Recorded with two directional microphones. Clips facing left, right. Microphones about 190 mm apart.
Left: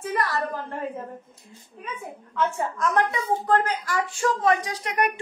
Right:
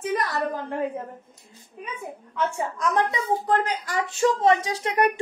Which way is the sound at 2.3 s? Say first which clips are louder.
Left 1 dB; 15° right (ahead or behind).